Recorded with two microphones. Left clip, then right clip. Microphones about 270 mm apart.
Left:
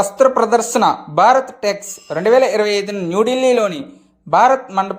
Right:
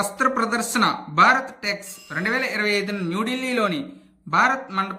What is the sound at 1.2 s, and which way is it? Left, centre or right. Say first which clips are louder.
Speech: left 5 dB; centre.